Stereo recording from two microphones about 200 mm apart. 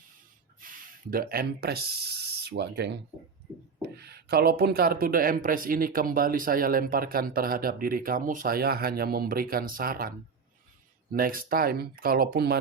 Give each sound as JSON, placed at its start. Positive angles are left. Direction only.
{"t": 0.6, "sound": "speech", "side_deg": -45}
{"t": 11.1, "sound": "speech", "side_deg": -45}